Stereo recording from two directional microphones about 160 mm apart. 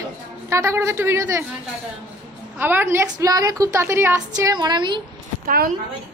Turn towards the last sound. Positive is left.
turn(degrees=-70)  # may be behind; listen again after turning